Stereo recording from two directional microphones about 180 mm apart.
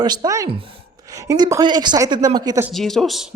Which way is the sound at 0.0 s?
25° right (ahead or behind).